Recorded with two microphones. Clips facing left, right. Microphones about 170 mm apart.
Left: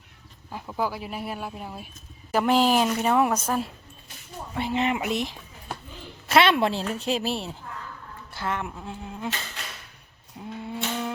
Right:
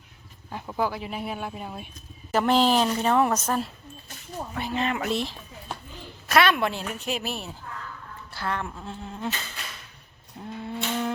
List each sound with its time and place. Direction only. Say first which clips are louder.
0.5 s speech: right 1 dB; 5° right (ahead or behind)
0.8 s a woman's voice: right 1 dB; 5° left (ahead or behind)
4.5 s a woman's voice: left 3 dB; 25° left (ahead or behind)
6.2 s a woman's voice: left 2 dB; 25° left (ahead or behind)
8.3 s a woman's voice: even; 20° left (ahead or behind)
10.3 s a sound: even; 5° left (ahead or behind)